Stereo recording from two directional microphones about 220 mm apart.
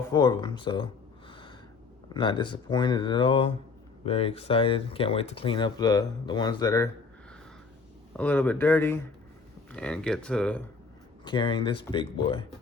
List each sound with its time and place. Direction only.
0.1 s speech: 20° left (ahead or behind)
1.3 s snort: 20° left (ahead or behind)
2.1 s speech: 20° left (ahead or behind)
8.1 s speech: 5° left (ahead or behind)
11.3 s speech: 20° left (ahead or behind)